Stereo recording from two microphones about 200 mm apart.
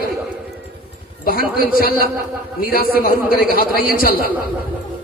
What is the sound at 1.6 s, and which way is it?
A man's voice, 45° left (ahead or behind).